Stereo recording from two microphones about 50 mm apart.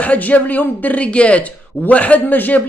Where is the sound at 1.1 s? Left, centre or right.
Left.